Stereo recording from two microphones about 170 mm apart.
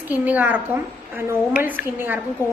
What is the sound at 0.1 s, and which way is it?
A woman's voice, 10° right (ahead or behind).